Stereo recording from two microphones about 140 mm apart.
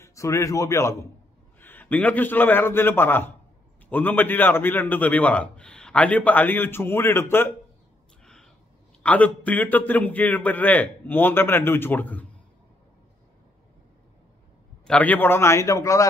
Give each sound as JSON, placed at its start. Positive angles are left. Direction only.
{"t": 0.0, "sound": "a man's voice", "side_deg": 20}
{"t": 9.0, "sound": "a man's voice", "side_deg": 10}
{"t": 14.9, "sound": "a man's voice", "side_deg": 10}